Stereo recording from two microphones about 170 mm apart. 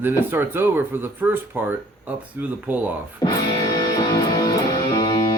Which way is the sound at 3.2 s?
25° left (ahead or behind).